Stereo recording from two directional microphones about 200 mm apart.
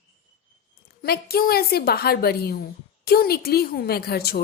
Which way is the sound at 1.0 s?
50° left (ahead or behind).